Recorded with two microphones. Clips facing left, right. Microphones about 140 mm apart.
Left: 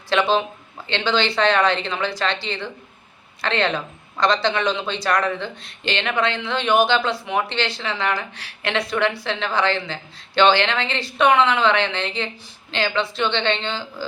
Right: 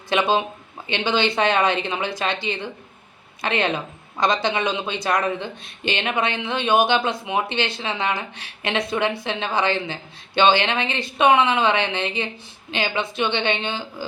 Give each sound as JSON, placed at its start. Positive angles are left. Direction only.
{"t": 0.1, "sound": "a woman's voice", "side_deg": -15}